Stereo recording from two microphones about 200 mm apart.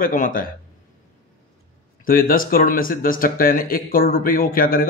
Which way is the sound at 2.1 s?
45° left (ahead or behind).